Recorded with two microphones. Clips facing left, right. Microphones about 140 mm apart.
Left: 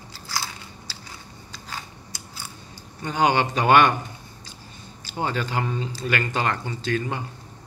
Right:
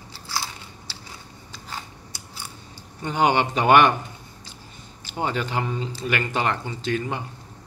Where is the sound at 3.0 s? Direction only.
20° right (ahead or behind).